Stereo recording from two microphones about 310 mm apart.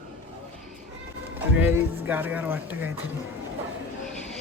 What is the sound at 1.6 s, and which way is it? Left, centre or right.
Speech, centre.